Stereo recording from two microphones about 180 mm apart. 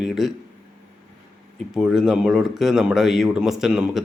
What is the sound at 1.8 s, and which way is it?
Speech, centre (ahead or behind).